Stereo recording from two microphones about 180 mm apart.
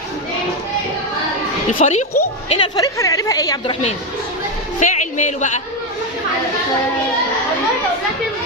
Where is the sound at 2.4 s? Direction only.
25° left (ahead or behind).